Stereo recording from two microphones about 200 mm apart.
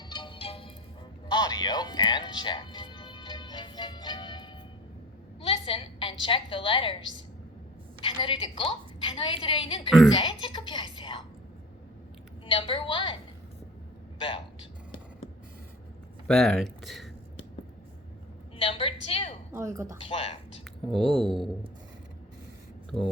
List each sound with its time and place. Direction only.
0.1 s music: 25° left (ahead or behind)
5.4 s a woman's voice: 25° left (ahead or behind)
8.0 s speech: 25° left (ahead or behind)
12.5 s speech: 25° left (ahead or behind)
14.2 s a man's voice: 25° left (ahead or behind)
16.2 s speech: 5° left (ahead or behind)
18.5 s a woman's voice: 30° left (ahead or behind)
19.5 s speech: 15° right (ahead or behind)
20.1 s speech: 30° left (ahead or behind)
20.9 s speech: centre (ahead or behind)